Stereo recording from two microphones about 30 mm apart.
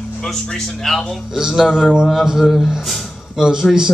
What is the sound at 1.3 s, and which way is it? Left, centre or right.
Speech, centre.